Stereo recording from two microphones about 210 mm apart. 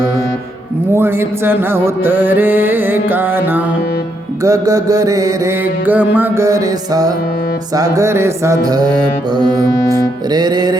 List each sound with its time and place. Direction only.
0.9 s music: 10° right (ahead or behind)